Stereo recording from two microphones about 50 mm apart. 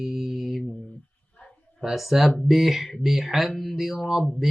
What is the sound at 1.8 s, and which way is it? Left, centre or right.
Speech, centre.